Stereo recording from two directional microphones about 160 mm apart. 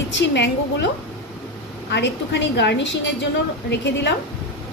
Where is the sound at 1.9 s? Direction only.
90° left.